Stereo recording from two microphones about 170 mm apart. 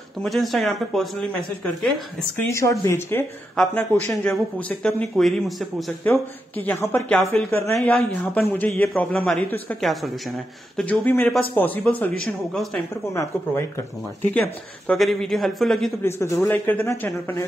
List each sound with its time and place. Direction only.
0.2 s a man's voice: centre (ahead or behind)
2.5 s speech: 20° left (ahead or behind)
3.6 s a man's voice: 5° left (ahead or behind)
6.0 s a man's voice: 10° left (ahead or behind)
13.1 s speech: 15° left (ahead or behind)
14.9 s a man's voice: centre (ahead or behind)
16.0 s speech: 15° left (ahead or behind)